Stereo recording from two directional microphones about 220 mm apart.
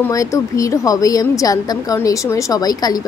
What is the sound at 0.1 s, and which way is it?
A woman's voice, 15° left (ahead or behind).